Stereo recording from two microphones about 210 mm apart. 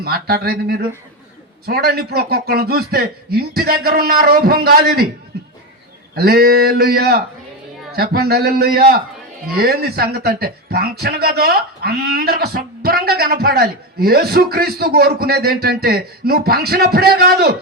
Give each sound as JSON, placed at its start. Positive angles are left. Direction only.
{"t": 0.0, "sound": "speech", "side_deg": -45}
{"t": 5.3, "sound": "a sound", "side_deg": -50}
{"t": 6.1, "sound": "speech", "side_deg": -45}